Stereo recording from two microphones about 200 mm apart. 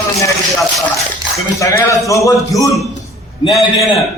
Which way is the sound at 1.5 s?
15° left (ahead or behind).